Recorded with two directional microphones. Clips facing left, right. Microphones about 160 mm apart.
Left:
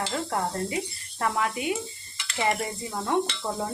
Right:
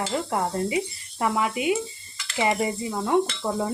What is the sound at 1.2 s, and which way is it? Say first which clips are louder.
Speech: right 3 dB; 10° right (ahead or behind).